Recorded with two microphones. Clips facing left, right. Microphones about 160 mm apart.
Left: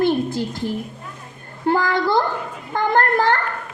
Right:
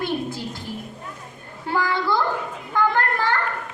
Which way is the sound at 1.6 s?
50° left (ahead or behind).